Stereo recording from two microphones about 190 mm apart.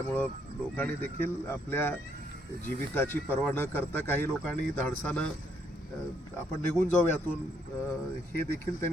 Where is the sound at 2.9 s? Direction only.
10° left (ahead or behind).